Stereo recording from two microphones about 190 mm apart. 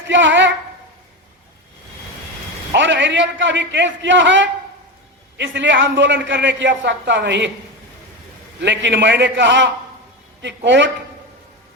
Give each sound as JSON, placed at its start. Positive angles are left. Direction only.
{"t": 0.1, "sound": "a woman's voice", "side_deg": -75}
{"t": 2.7, "sound": "a man's voice", "side_deg": -75}
{"t": 8.6, "sound": "a man's voice", "side_deg": -65}